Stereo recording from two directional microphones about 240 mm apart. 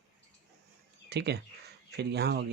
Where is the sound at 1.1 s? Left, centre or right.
Right.